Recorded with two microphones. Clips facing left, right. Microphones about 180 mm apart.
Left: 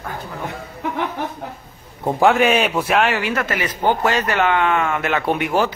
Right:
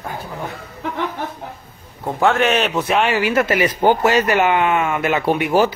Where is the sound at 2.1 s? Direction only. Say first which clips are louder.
Left 1 dB; 15° left (ahead or behind).